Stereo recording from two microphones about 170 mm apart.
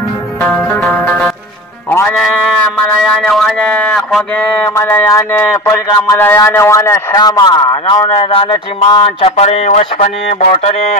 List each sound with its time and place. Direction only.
0.4 s music: 15° left (ahead or behind)
0.8 s music: centre (ahead or behind)
1.9 s music: 15° left (ahead or behind)
3.0 s music: centre (ahead or behind); by 10.1 s 40° left (ahead or behind)
10.4 s a sound: 40° left (ahead or behind)